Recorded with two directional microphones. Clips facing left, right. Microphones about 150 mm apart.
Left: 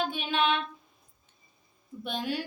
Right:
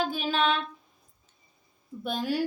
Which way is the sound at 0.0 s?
35° right (ahead or behind).